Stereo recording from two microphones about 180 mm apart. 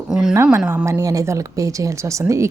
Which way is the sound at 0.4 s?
10° right (ahead or behind).